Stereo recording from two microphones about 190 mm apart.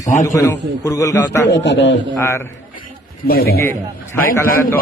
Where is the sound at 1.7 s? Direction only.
70° left (ahead or behind).